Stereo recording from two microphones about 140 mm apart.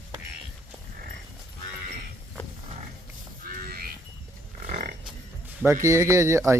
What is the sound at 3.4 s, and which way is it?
Livestock, 90° right.